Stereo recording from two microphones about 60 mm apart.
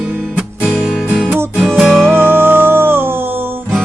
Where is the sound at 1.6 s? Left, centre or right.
Centre.